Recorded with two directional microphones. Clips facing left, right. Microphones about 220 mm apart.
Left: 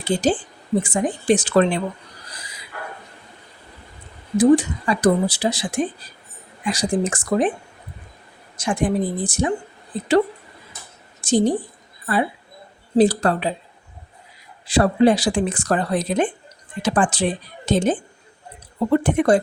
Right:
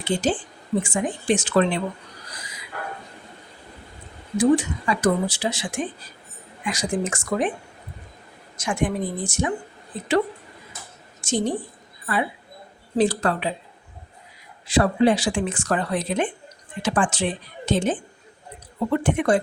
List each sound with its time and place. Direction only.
0.0 s speech: 35° left (ahead or behind)
4.4 s speech: 35° left (ahead or behind)
8.5 s speech: 35° left (ahead or behind)
11.2 s a woman's voice: 35° left (ahead or behind)
13.0 s speech: 35° left (ahead or behind)
14.7 s speech: 35° left (ahead or behind)